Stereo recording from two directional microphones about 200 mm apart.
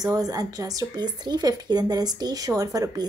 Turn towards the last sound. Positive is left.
turn(degrees=-20)  # may be behind; listen again after turning